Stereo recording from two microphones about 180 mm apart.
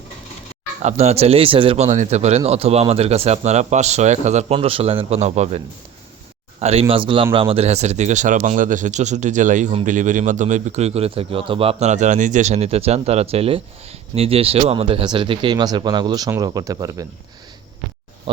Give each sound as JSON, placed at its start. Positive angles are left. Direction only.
{"t": 0.8, "sound": "speech", "side_deg": -40}